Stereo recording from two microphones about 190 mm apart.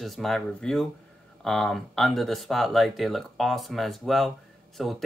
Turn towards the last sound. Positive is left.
turn(degrees=0)  # may be behind; listen again after turning